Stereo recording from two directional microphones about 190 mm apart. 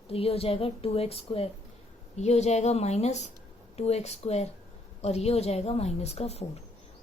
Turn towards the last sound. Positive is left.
turn(degrees=35)  # may be behind; listen again after turning